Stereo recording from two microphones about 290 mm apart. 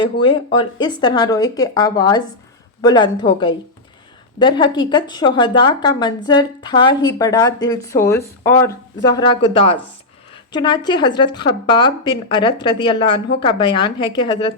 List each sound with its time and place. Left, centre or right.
0.0 s a woman's voice: centre